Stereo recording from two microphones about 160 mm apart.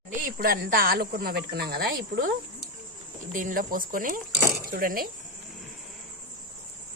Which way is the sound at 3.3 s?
60° right (ahead or behind).